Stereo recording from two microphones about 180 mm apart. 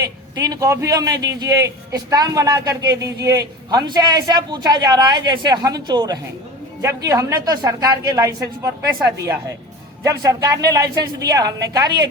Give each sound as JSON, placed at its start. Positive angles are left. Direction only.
{"t": 0.0, "sound": "a man's voice", "side_deg": -20}
{"t": 10.0, "sound": "a man's voice", "side_deg": -20}